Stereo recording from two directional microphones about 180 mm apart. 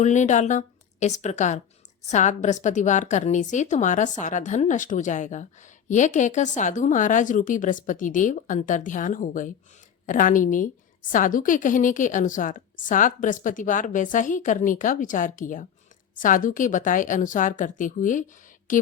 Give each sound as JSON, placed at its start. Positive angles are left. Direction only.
{"t": 0.0, "sound": "a woman's voice", "side_deg": 40}